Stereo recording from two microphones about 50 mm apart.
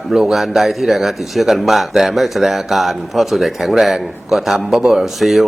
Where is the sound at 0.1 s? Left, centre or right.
Centre.